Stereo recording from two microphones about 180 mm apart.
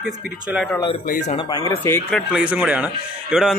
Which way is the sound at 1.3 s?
30° left (ahead or behind).